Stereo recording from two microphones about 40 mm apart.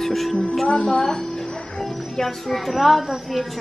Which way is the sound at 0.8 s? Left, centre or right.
Centre.